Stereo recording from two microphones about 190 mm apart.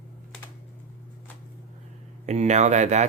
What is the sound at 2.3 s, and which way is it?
Speech, 35° right (ahead or behind).